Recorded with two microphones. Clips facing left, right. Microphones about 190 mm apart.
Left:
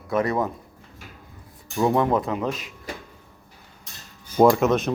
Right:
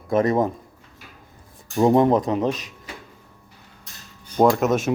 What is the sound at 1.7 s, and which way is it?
Speech, 25° right (ahead or behind).